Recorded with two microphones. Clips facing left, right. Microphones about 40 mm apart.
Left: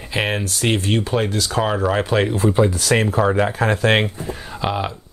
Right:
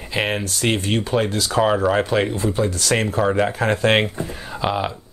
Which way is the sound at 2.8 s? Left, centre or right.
Centre.